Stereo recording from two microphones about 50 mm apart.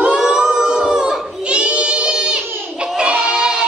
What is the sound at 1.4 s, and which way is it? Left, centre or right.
Child singing, right.